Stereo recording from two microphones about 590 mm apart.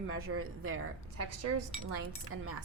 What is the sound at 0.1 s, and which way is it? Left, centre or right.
Speech, right.